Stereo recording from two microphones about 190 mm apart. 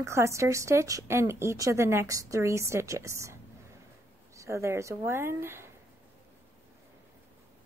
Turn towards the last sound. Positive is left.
turn(degrees=-15)  # may be behind; listen again after turning